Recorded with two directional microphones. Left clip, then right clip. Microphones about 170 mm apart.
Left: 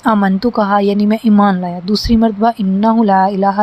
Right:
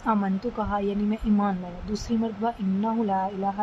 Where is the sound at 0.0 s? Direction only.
45° left (ahead or behind).